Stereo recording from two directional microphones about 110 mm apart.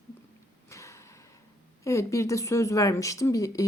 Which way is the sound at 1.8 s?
30° left (ahead or behind).